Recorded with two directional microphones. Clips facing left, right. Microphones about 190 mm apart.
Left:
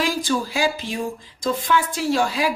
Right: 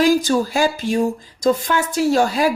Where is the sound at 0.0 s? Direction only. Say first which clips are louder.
Right 7 dB; 45° right (ahead or behind).